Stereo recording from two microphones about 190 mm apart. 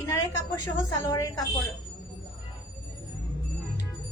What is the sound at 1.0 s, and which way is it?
Speech, 20° left (ahead or behind).